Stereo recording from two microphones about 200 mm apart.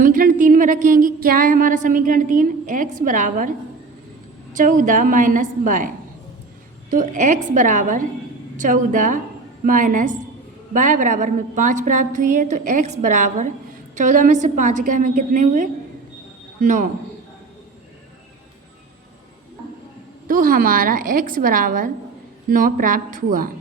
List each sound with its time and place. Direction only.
0.0 s speech: 45° right (ahead or behind)
4.5 s a woman's voice: 40° right (ahead or behind)
6.9 s a woman's voice: 40° right (ahead or behind)
20.2 s a woman's voice: 45° right (ahead or behind)